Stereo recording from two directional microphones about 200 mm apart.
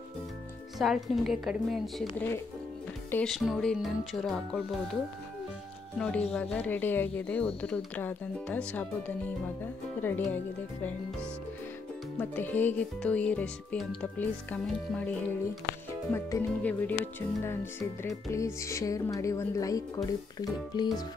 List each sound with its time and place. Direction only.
0.7 s speech: centre (ahead or behind)
5.9 s speech: 5° left (ahead or behind)
12.2 s speech: 10° left (ahead or behind)